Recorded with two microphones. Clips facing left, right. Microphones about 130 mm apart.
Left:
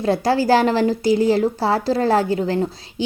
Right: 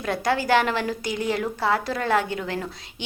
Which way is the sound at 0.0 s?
35° left (ahead or behind).